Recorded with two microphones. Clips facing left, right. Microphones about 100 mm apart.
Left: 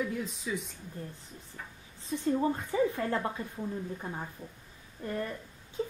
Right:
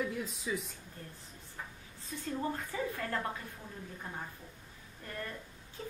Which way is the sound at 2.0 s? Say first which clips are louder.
Left 8 dB; 20° left (ahead or behind).